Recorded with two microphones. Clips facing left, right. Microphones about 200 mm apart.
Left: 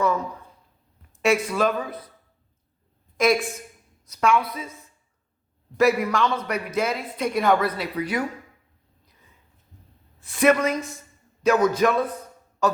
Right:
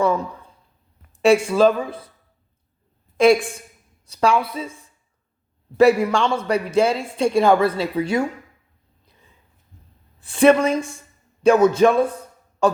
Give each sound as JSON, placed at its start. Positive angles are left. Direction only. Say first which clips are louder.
{"t": 1.2, "sound": "a man's voice", "louder": "right 6 dB", "side_deg": -30}
{"t": 3.2, "sound": "a woman's voice", "louder": "right 6 dB", "side_deg": -30}
{"t": 10.2, "sound": "a man's voice", "louder": "right 5 dB", "side_deg": -30}